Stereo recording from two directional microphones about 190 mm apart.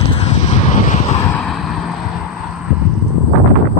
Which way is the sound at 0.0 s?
35° left (ahead or behind).